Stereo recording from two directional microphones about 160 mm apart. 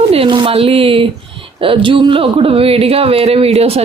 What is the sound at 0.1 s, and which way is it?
Speech, 35° right (ahead or behind).